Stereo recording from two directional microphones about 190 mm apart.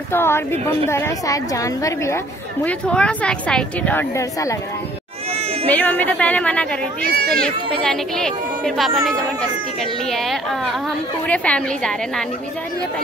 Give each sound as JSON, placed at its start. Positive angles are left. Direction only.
{"t": 0.1, "sound": "a woman's voice", "side_deg": 10}
{"t": 2.6, "sound": "a woman's voice", "side_deg": 5}
{"t": 5.3, "sound": "goat", "side_deg": -30}
{"t": 5.7, "sound": "a woman's voice", "side_deg": 10}
{"t": 7.2, "sound": "speech", "side_deg": -55}
{"t": 7.4, "sound": "a woman's voice", "side_deg": 0}